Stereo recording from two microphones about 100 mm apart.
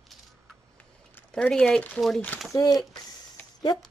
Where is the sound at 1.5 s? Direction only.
10° left (ahead or behind).